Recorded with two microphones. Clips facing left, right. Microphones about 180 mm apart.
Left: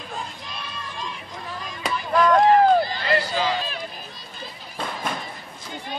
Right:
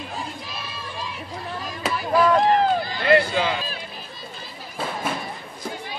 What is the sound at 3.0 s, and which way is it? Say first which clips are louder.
Speech: right 5 dB; 55° right (ahead or behind).